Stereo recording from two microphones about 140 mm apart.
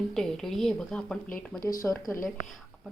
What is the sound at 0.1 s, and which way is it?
Speech, 5° left (ahead or behind).